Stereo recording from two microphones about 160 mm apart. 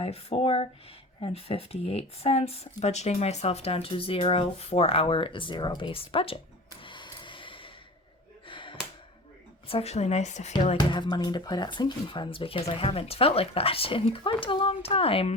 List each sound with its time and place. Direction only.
0.0 s speech: 40° left (ahead or behind)
6.8 s a sound: 30° left (ahead or behind)
8.4 s gasp: 30° left (ahead or behind)
9.6 s speech: 40° left (ahead or behind)
10.6 s speech: 30° left (ahead or behind)